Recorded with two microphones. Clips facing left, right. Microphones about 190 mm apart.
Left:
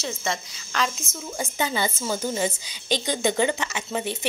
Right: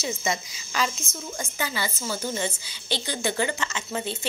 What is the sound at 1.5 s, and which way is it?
A woman's voice, 20° left (ahead or behind).